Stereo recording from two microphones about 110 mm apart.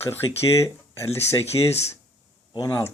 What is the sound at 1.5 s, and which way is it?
Speech, 45° left (ahead or behind).